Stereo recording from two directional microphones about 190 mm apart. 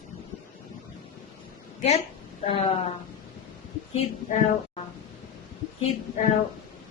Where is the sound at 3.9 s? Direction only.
40° left (ahead or behind).